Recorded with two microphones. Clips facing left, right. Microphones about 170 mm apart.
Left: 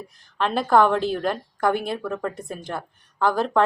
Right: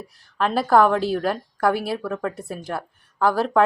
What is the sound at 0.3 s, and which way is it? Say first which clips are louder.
A woman's voice: right 1 dB; 5° right (ahead or behind).